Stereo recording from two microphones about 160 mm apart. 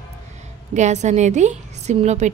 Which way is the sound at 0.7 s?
45° right (ahead or behind).